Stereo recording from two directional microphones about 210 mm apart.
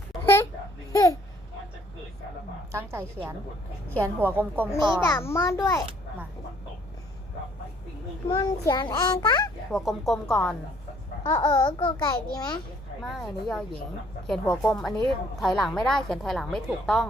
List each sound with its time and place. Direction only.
2.7 s a woman's voice: 10° right (ahead or behind)
5.0 s a child's voice: 10° left (ahead or behind)
8.3 s speech: 20° left (ahead or behind)
9.7 s a woman's voice: centre (ahead or behind)
11.2 s speech: 20° left (ahead or behind)
13.0 s a woman's voice: centre (ahead or behind)